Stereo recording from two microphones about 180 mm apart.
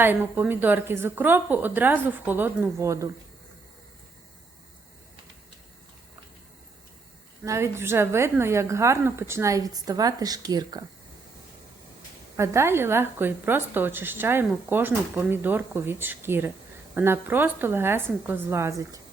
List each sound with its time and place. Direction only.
0.0 s a woman's voice: 10° right (ahead or behind)
7.4 s a woman's voice: 15° right (ahead or behind)
12.4 s a woman's voice: 15° right (ahead or behind)